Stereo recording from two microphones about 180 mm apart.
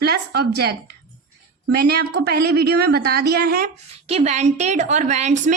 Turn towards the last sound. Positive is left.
turn(degrees=-40)  # may be behind; listen again after turning